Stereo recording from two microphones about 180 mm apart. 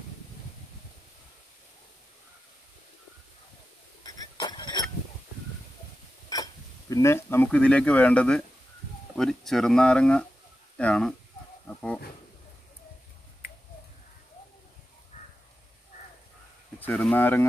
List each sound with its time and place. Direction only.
4.0 s goat: 20° left (ahead or behind)
6.2 s speech: 20° left (ahead or behind)
11.6 s wild animals: 5° left (ahead or behind)
15.1 s crow: 40° left (ahead or behind)
16.8 s speech: 5° left (ahead or behind)